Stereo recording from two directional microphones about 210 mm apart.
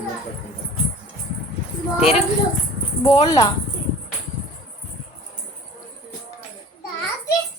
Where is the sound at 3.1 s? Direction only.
20° left (ahead or behind).